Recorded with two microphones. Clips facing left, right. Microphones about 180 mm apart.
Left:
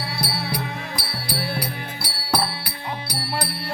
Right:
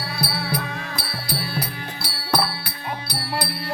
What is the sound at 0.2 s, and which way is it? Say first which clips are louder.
Music: right 2 dB; 10° left (ahead or behind).